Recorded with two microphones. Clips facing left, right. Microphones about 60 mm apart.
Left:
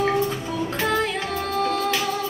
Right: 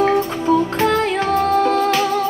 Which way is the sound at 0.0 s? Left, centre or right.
Right.